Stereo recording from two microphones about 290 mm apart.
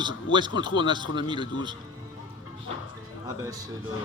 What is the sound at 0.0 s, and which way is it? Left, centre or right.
Speech, centre.